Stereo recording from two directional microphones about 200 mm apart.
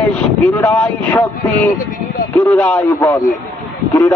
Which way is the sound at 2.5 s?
5° left (ahead or behind).